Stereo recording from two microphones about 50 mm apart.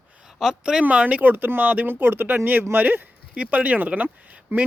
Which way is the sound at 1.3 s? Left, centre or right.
Right.